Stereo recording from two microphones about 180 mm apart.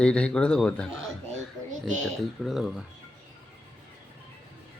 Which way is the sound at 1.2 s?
45° right (ahead or behind).